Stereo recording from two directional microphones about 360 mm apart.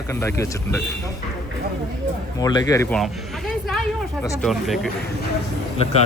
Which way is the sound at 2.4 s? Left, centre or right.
Centre.